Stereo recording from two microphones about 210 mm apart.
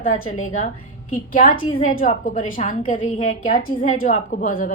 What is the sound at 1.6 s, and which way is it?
Speech, 25° left (ahead or behind).